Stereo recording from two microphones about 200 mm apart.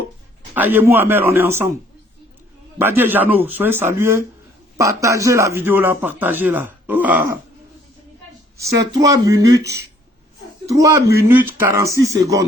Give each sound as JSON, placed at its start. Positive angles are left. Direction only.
{"t": 0.5, "sound": "speech", "side_deg": -10}
{"t": 2.7, "sound": "speech", "side_deg": -10}
{"t": 8.7, "sound": "speech", "side_deg": -15}
{"t": 10.7, "sound": "speech", "side_deg": -15}